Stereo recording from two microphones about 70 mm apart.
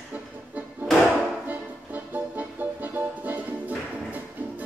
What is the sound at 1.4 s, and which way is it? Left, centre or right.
Music, right.